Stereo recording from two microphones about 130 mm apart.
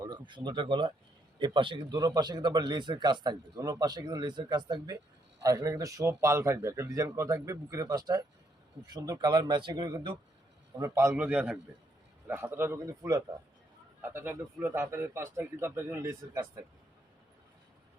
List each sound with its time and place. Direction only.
0.0 s a man's voice: 35° right (ahead or behind)
10.8 s speech: 25° right (ahead or behind)
11.1 s a man's voice: 10° right (ahead or behind); by 13.2 s 25° right (ahead or behind)
14.0 s speech: 15° right (ahead or behind)